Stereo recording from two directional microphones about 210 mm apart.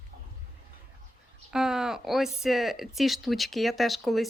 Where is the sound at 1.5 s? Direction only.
Centre (ahead or behind).